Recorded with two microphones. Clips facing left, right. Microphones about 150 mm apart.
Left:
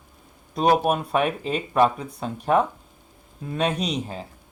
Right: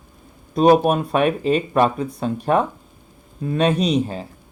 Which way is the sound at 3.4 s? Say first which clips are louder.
Right 6 dB; 70° right (ahead or behind).